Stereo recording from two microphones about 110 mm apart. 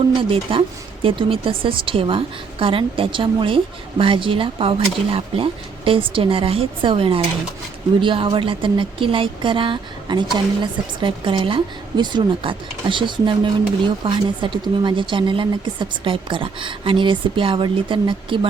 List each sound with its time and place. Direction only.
0.2 s speech: 55° right (ahead or behind)